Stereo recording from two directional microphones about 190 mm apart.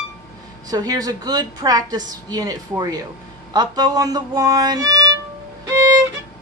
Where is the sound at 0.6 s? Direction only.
20° right (ahead or behind).